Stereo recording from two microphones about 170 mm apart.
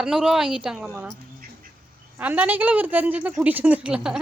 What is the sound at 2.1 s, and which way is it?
A woman's voice, 10° right (ahead or behind).